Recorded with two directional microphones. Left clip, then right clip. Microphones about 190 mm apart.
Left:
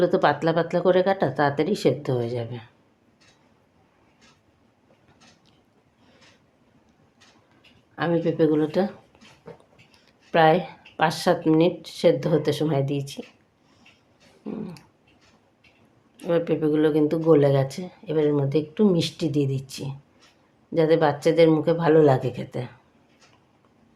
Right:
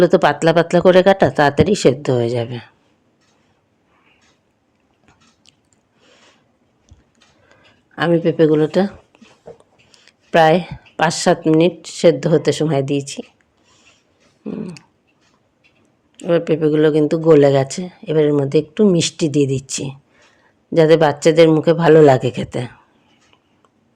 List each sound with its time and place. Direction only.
0.0 s speech: 40° right (ahead or behind)
7.9 s speech: 40° right (ahead or behind)
9.1 s a sound: 30° right (ahead or behind)
9.9 s speech: 40° right (ahead or behind)
14.4 s speech: 30° right (ahead or behind)
16.2 s speech: 35° right (ahead or behind)